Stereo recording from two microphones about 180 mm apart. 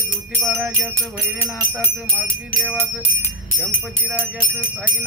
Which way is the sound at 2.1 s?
Centre (ahead or behind).